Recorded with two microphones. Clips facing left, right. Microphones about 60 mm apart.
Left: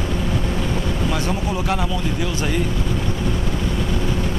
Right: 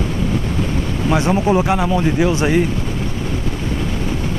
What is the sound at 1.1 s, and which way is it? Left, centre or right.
Speech, right.